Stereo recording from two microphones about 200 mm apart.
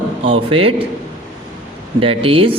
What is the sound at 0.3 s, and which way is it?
Speech, 25° right (ahead or behind).